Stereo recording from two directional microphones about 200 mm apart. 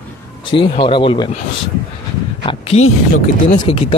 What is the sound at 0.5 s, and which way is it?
Speech, 25° left (ahead or behind).